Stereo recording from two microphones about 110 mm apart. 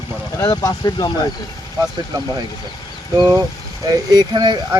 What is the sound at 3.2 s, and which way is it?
Speech, 40° right (ahead or behind).